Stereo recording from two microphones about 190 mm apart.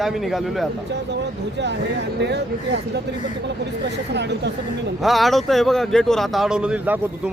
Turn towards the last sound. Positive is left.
turn(degrees=-5)  # may be behind; listen again after turning